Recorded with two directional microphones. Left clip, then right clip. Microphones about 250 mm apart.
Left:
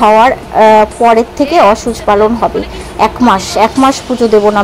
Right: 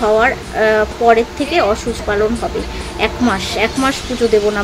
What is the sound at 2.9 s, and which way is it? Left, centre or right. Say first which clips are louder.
Speech: left 8 dB; centre.